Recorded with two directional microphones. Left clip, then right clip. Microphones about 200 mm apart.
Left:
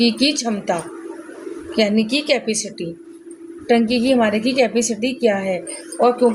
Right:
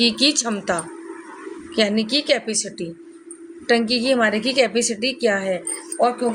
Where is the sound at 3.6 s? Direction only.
40° right (ahead or behind).